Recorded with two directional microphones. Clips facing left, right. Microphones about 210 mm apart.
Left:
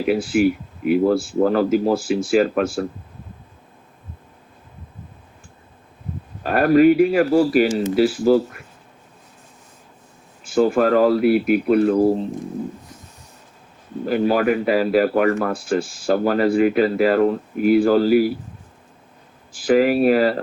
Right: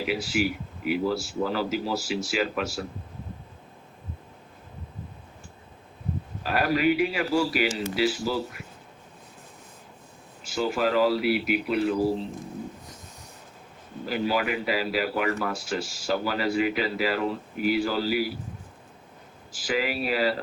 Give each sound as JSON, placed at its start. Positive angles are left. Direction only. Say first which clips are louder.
{"t": 0.1, "sound": "a man's voice", "louder": "left 11 dB", "side_deg": 55}
{"t": 6.4, "sound": "a man's voice", "louder": "left 10 dB", "side_deg": 50}
{"t": 10.4, "sound": "a man's voice", "louder": "left 9 dB", "side_deg": 50}
{"t": 14.0, "sound": "a man's voice", "louder": "left 8 dB", "side_deg": 50}
{"t": 19.5, "sound": "a man's voice", "louder": "left 12 dB", "side_deg": 50}